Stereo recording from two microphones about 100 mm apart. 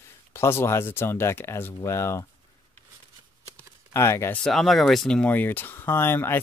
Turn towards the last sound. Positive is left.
turn(degrees=25)  # may be behind; listen again after turning